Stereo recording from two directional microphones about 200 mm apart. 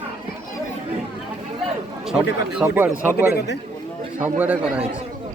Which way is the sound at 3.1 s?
50° left (ahead or behind).